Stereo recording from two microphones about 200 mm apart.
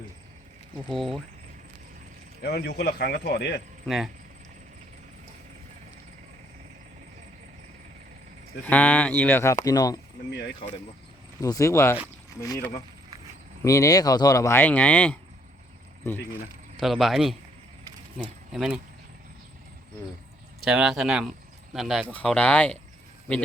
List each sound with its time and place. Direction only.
0.9 s speech: centre (ahead or behind)
2.4 s speech: 55° left (ahead or behind)
3.8 s speech: centre (ahead or behind)
8.6 s speech: 10° left (ahead or behind)
11.3 s speech: 15° left (ahead or behind)
16.8 s speech: centre (ahead or behind)
18.5 s speech: centre (ahead or behind)
20.7 s speech: centre (ahead or behind)